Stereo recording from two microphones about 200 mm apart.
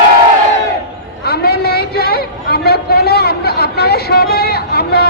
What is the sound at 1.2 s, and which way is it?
A man's voice, 50° left (ahead or behind).